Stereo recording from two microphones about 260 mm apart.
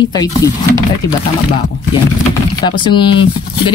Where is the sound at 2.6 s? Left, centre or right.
Centre.